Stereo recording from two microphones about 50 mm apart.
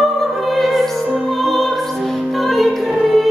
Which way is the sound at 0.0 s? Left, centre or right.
Centre.